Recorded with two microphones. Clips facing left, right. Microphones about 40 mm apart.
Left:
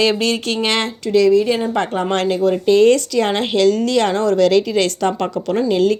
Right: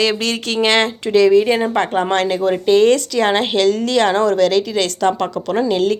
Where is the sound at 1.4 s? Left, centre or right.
Right.